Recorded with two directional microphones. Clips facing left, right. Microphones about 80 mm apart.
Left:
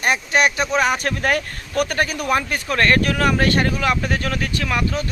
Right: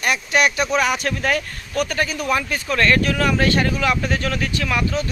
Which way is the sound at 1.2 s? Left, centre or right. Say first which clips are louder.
Left 1 dB; left.